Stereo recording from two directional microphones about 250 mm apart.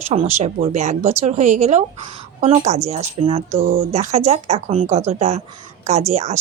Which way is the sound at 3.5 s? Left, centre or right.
Right.